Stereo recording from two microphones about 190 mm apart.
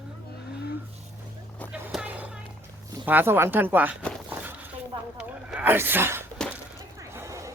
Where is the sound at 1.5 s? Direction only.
10° left (ahead or behind).